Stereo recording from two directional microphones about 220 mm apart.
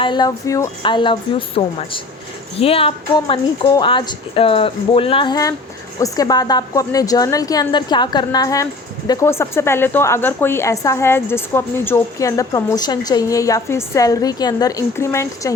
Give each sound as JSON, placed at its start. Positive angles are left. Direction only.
{"t": 0.0, "sound": "a woman's voice", "side_deg": 20}